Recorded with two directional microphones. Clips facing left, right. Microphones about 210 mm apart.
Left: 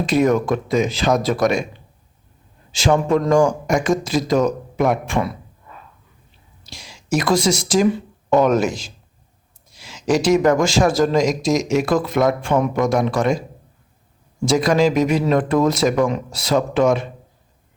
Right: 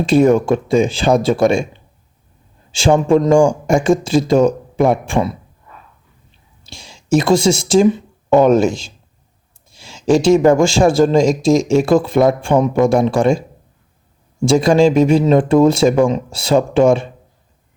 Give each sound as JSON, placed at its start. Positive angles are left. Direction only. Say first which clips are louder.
{"t": 0.0, "sound": "speech", "louder": "right 5 dB", "side_deg": -30}
{"t": 2.7, "sound": "speech", "louder": "right 5 dB", "side_deg": -30}
{"t": 6.7, "sound": "a man's voice", "louder": "right 6 dB", "side_deg": -25}
{"t": 14.4, "sound": "speech", "louder": "right 5 dB", "side_deg": -25}